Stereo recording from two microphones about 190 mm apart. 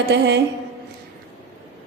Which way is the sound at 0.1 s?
65° right (ahead or behind).